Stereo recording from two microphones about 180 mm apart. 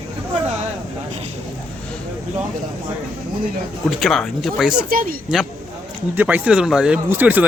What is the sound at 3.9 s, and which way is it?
Speech, centre (ahead or behind).